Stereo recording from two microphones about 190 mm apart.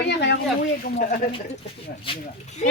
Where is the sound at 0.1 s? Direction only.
65° left (ahead or behind).